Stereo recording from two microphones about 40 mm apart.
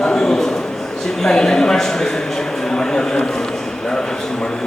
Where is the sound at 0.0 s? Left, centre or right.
Centre.